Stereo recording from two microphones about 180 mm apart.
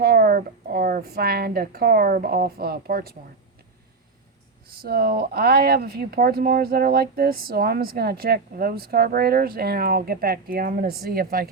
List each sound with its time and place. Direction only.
0.0 s speech: 55° right (ahead or behind)
4.8 s speech: 60° right (ahead or behind)